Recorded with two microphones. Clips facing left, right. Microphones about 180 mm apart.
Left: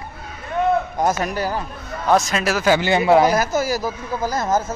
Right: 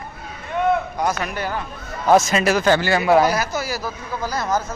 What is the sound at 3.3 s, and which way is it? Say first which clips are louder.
Speech: left 4 dB; 45° left (ahead or behind).